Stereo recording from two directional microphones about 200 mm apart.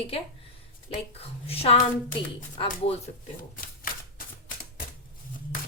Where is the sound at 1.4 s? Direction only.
30° left (ahead or behind).